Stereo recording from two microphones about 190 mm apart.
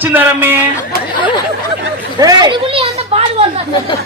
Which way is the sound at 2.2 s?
20° right (ahead or behind).